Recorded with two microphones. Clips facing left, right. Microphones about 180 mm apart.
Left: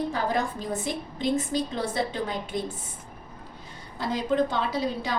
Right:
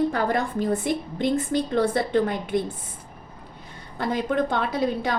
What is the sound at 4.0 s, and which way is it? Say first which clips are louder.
A woman's voice: right 1 dB; 55° right (ahead or behind).